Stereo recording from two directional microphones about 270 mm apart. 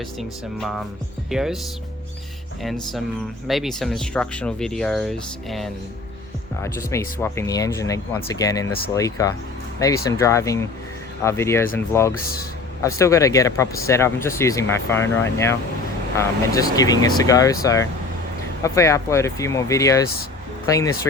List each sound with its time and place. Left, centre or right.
0.2 s speech: centre
2.6 s speech: centre